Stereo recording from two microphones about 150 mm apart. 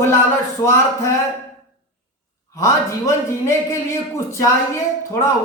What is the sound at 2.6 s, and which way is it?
A man's voice, 20° left (ahead or behind).